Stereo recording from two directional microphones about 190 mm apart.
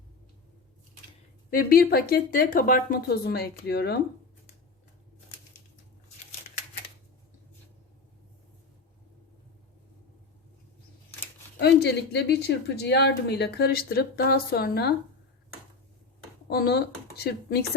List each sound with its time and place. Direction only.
1.5 s a woman's voice: 50° left (ahead or behind)
11.5 s speech: 60° left (ahead or behind)
16.5 s speech: 55° left (ahead or behind)